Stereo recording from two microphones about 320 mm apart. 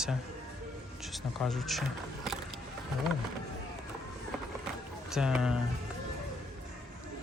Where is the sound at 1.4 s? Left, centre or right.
Centre.